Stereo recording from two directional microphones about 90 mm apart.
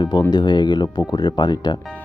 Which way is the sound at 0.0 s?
45° left (ahead or behind).